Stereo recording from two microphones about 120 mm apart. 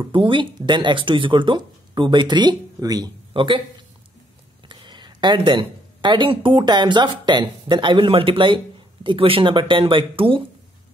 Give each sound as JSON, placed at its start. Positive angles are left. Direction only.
{"t": 0.0, "sound": "speech", "side_deg": -45}
{"t": 3.3, "sound": "speech", "side_deg": -45}
{"t": 4.6, "sound": "speech", "side_deg": -40}